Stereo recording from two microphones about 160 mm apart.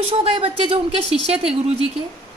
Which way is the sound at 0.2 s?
35° right (ahead or behind).